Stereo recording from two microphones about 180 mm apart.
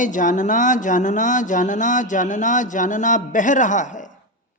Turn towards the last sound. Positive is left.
turn(degrees=45)  # may be behind; listen again after turning